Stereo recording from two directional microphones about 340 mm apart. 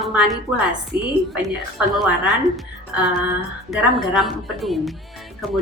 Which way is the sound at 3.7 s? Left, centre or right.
Centre.